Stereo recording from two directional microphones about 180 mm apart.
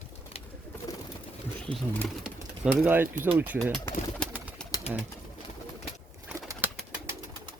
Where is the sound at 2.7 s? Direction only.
10° right (ahead or behind).